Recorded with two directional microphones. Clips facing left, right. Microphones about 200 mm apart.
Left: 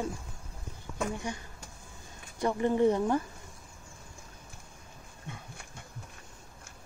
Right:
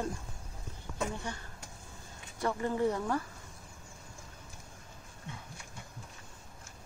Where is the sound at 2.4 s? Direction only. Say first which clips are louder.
Left 5 dB; 20° left (ahead or behind).